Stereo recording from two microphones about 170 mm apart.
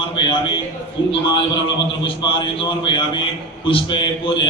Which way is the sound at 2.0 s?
30° left (ahead or behind).